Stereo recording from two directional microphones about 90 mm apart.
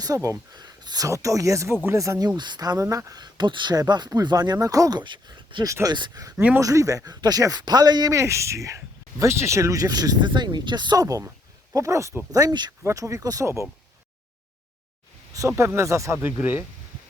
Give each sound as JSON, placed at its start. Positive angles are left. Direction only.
{"t": 0.0, "sound": "speech", "side_deg": -40}
{"t": 0.5, "sound": "speech", "side_deg": -50}
{"t": 1.0, "sound": "speech", "side_deg": -35}
{"t": 2.8, "sound": "speech", "side_deg": -35}
{"t": 5.6, "sound": "speech", "side_deg": -35}
{"t": 6.3, "sound": "speech", "side_deg": -20}
{"t": 6.6, "sound": "speech", "side_deg": -40}
{"t": 8.1, "sound": "speech", "side_deg": -35}
{"t": 12.9, "sound": "speech", "side_deg": -35}
{"t": 15.3, "sound": "speech", "side_deg": -35}
{"t": 16.2, "sound": "speech", "side_deg": -20}